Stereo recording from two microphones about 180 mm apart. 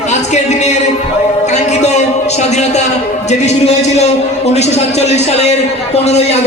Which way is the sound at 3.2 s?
40° left (ahead or behind).